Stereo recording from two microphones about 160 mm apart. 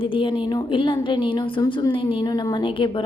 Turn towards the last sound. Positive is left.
turn(degrees=30)  # may be behind; listen again after turning